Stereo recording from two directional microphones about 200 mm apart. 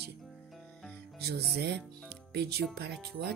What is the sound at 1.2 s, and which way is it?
Speech, 55° right (ahead or behind).